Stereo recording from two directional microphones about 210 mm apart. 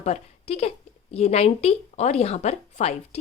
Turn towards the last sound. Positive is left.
turn(degrees=30)  # may be behind; listen again after turning